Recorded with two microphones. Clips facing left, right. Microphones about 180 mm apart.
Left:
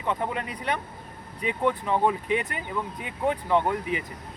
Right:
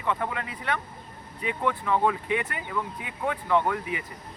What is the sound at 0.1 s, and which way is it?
Speech, 20° left (ahead or behind).